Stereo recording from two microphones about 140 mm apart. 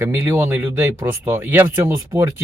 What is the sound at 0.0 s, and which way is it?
Speech, 20° right (ahead or behind).